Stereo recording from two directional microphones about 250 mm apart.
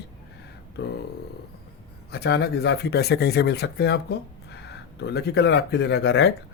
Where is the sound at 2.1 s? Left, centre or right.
Left.